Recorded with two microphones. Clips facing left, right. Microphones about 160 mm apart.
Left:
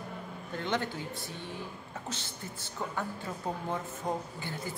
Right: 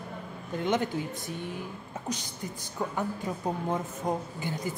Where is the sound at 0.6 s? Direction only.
20° right (ahead or behind).